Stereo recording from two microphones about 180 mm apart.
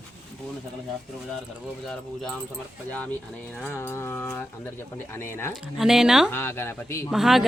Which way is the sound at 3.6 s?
10° left (ahead or behind).